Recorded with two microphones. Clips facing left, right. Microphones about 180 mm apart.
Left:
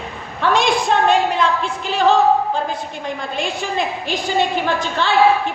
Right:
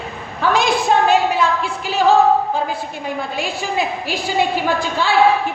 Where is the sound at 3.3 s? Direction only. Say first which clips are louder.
Left 1 dB; 5° right (ahead or behind).